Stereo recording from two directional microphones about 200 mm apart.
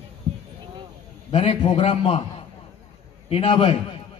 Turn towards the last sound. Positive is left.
turn(degrees=25)  # may be behind; listen again after turning